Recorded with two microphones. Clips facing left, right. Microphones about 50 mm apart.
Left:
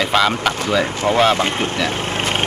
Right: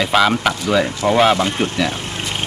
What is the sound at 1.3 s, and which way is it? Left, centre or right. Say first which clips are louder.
Speech: right 1 dB; left.